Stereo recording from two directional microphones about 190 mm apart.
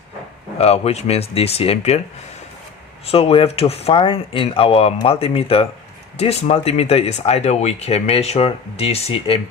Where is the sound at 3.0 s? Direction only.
30° left (ahead or behind).